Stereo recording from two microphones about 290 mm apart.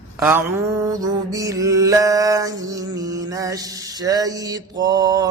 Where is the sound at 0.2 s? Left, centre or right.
Centre.